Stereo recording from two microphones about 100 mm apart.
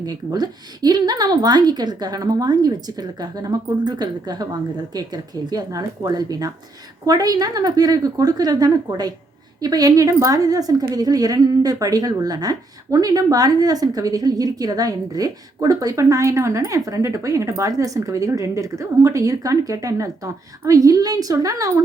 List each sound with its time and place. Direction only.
0.0 s a woman's voice: 40° right (ahead or behind)